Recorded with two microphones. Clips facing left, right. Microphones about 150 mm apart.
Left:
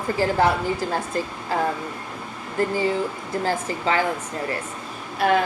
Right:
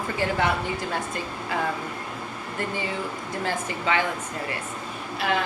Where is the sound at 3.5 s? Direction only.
35° left (ahead or behind).